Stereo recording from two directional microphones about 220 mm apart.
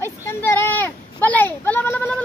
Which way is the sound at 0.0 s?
10° left (ahead or behind).